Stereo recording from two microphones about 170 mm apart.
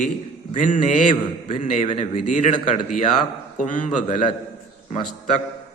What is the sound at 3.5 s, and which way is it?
Speech, 50° left (ahead or behind).